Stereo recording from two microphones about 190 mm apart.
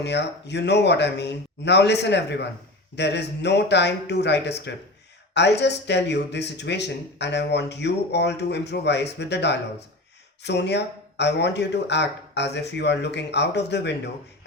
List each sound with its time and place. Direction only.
0.0 s speech: 65° left (ahead or behind)